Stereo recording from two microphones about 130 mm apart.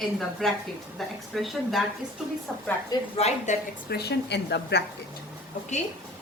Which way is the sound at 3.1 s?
55° left (ahead or behind).